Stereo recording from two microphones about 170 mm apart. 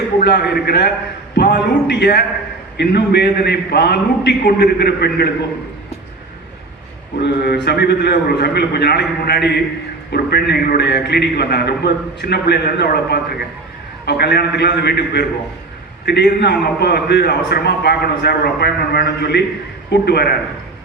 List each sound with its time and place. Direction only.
0.2 s a man's voice: 70° left (ahead or behind)
7.2 s a man's voice: 75° left (ahead or behind)